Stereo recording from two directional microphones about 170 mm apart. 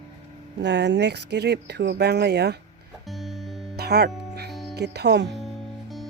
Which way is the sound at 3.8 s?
75° right (ahead or behind).